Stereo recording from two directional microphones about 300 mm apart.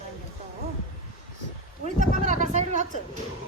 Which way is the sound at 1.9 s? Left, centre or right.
Right.